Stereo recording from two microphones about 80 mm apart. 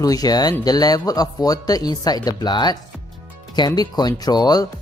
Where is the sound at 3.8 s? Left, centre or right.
Left.